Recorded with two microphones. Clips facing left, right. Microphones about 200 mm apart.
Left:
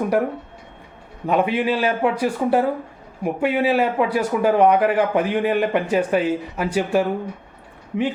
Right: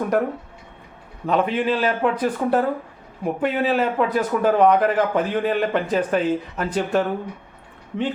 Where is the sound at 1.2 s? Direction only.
10° left (ahead or behind).